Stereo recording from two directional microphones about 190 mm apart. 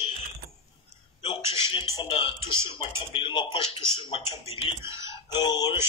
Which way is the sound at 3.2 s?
25° left (ahead or behind).